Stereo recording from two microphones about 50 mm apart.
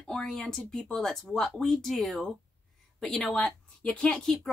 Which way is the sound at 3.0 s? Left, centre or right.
Centre.